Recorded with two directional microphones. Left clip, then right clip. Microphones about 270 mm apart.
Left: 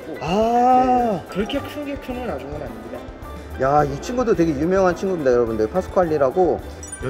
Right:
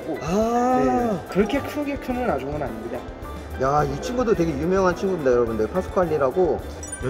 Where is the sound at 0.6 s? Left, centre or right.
Left.